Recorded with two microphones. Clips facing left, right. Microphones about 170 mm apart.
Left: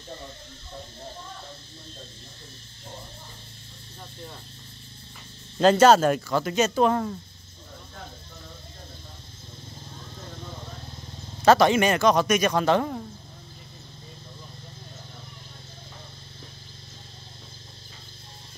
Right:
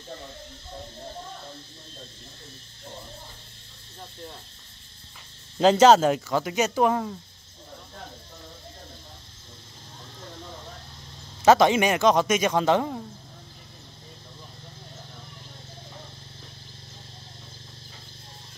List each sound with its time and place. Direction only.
5.6 s speech: 15° right (ahead or behind)
11.4 s speech: 15° right (ahead or behind)